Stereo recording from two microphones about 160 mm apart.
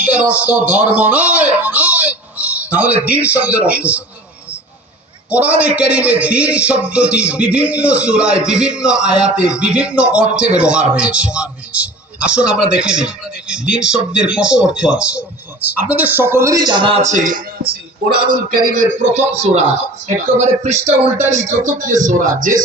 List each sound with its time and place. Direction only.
0.0 s a man's voice: 10° right (ahead or behind)
5.3 s a man's voice: 10° right (ahead or behind); by 17.0 s 30° right (ahead or behind)
17.0 s music: 50° right (ahead or behind)
18.5 s speech: 60° right (ahead or behind)